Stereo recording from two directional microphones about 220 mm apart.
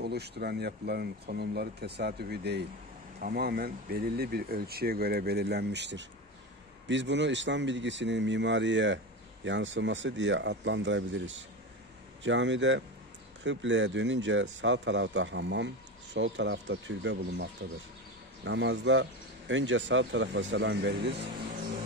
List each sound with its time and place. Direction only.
0.0 s speech: 50° right (ahead or behind)